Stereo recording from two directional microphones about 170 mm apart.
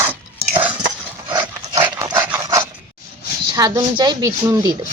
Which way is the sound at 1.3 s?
25° right (ahead or behind).